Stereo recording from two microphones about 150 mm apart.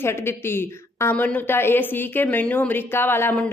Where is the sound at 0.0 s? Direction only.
15° left (ahead or behind).